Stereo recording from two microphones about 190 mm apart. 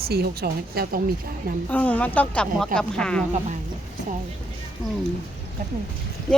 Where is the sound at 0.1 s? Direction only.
55° right (ahead or behind).